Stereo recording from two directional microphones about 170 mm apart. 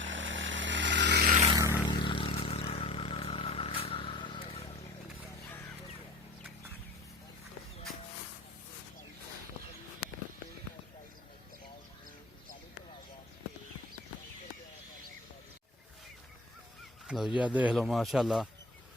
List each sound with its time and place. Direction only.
0.0 s chainsaw: 90° right
1.5 s a sound: 20° right (ahead or behind)
1.8 s vehicle: 25° left (ahead or behind)
17.1 s speech: 5° right (ahead or behind)